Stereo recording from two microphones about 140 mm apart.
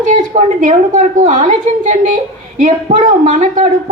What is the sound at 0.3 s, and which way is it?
A woman's voice, 60° right (ahead or behind).